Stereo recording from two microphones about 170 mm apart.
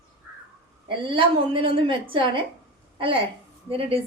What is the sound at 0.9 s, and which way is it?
A woman's voice, 30° right (ahead or behind).